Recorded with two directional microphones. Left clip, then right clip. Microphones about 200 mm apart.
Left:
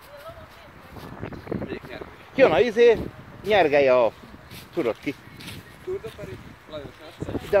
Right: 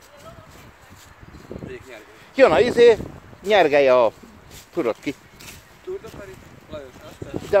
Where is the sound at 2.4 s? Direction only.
30° right (ahead or behind).